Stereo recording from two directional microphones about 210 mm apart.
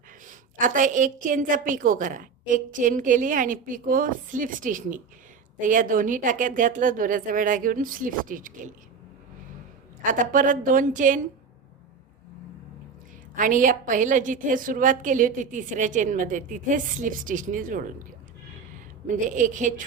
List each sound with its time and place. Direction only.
0.3 s a woman's voice: 40° right (ahead or behind)
10.1 s a woman's voice: 40° right (ahead or behind)
13.3 s a woman's voice: 40° right (ahead or behind)
19.0 s a woman's voice: 35° right (ahead or behind)